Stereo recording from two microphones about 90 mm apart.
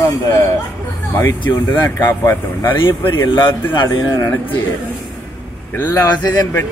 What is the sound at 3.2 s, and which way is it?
Speech, 60° left (ahead or behind).